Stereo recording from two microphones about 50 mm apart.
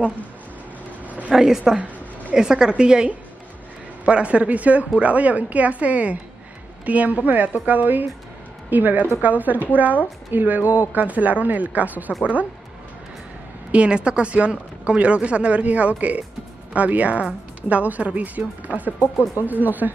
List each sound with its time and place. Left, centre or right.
1.3 s a woman's voice: centre; by 12.4 s right
13.7 s a woman's voice: right